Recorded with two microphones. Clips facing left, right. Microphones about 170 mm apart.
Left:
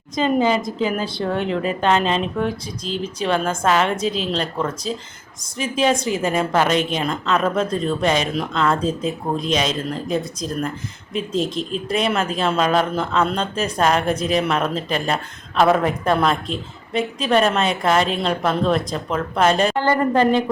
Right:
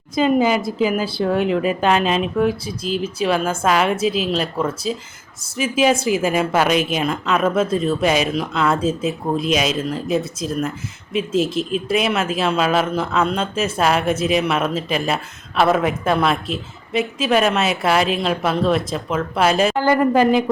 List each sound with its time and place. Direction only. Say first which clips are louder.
0.2 s a woman's voice: right 2 dB; 10° right (ahead or behind)